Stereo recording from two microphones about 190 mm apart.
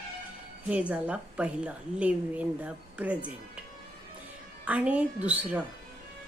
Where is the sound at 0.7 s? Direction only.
5° right (ahead or behind).